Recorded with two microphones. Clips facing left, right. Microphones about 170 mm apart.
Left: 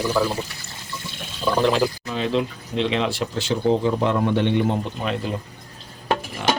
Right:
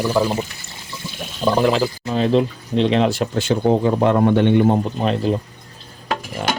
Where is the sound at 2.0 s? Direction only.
40° right (ahead or behind).